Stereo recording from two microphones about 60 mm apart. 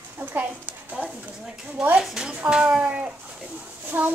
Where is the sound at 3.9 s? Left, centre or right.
Right.